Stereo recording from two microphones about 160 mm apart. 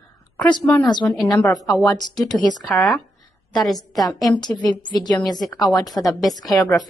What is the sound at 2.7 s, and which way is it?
A woman's voice, 5° left (ahead or behind).